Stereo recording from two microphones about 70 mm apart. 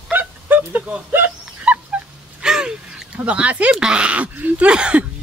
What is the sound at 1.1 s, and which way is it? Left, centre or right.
Dog, right.